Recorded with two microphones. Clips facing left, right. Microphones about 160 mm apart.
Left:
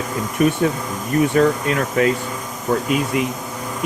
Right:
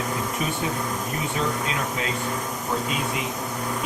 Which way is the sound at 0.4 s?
60° left (ahead or behind).